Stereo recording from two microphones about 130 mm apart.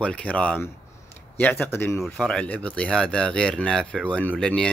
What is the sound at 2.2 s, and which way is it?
Speech, 5° left (ahead or behind).